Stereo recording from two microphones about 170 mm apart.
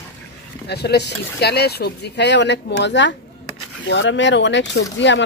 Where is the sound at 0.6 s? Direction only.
75° left (ahead or behind).